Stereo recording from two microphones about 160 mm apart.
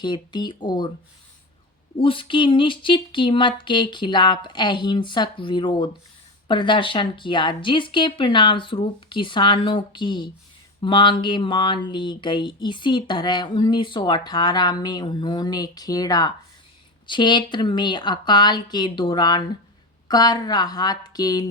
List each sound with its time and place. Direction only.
0.0 s speech: 25° left (ahead or behind)
2.0 s speech: 35° left (ahead or behind)